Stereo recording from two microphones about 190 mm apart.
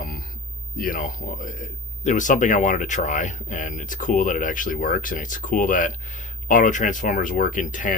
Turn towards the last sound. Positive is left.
turn(degrees=45)  # may be behind; listen again after turning